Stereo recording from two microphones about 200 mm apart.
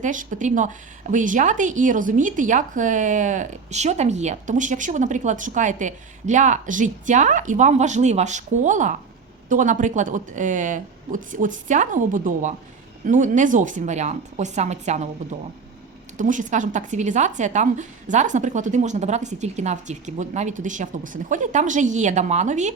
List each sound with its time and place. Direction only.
0.0 s speech: 40° right (ahead or behind)
16.1 s speech: 40° right (ahead or behind)